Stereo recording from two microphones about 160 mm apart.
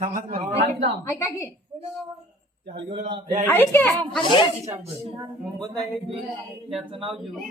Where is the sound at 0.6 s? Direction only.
90° right.